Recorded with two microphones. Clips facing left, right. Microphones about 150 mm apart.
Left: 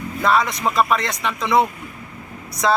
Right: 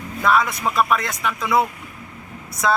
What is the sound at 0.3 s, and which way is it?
Speech, centre (ahead or behind).